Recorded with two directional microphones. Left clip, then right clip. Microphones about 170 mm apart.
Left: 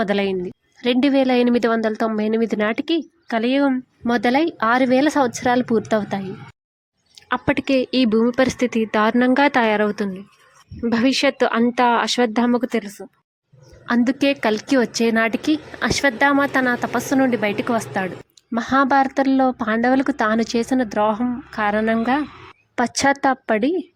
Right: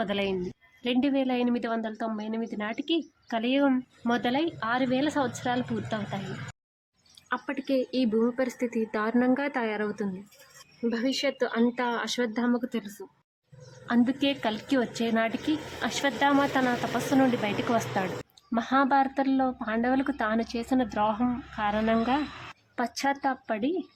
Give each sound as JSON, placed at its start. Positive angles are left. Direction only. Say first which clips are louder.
{"t": 0.0, "sound": "a woman's voice", "louder": "left 8 dB", "side_deg": 35}
{"t": 7.2, "sound": "a woman's voice", "louder": "left 11 dB", "side_deg": 35}